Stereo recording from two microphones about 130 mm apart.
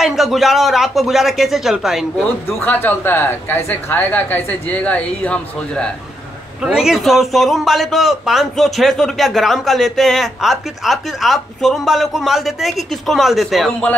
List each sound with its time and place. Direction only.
0.0 s a man's voice: centre (ahead or behind)
2.4 s speech: 15° left (ahead or behind)
6.6 s a man's voice: 5° right (ahead or behind)